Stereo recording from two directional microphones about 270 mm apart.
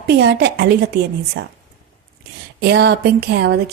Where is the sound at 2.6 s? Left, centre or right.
Right.